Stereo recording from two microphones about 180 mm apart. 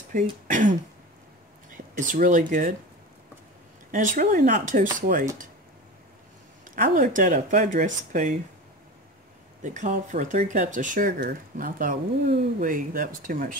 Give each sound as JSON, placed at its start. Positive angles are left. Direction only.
{"t": 0.1, "sound": "speech", "side_deg": -45}
{"t": 3.9, "sound": "speech", "side_deg": -50}
{"t": 6.7, "sound": "speech", "side_deg": -50}
{"t": 9.6, "sound": "speech", "side_deg": -45}